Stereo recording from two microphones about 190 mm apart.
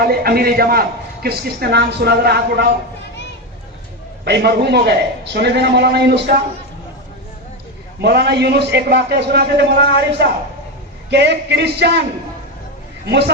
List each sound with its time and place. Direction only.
0.0 s a man's voice: 55° right (ahead or behind)
4.3 s a man's voice: 60° right (ahead or behind)
8.0 s a man's voice: 60° right (ahead or behind)
11.1 s a man's voice: 60° right (ahead or behind)
13.1 s a man's voice: 60° right (ahead or behind)